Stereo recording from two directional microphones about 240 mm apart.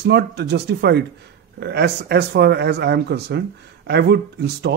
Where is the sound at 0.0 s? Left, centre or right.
Right.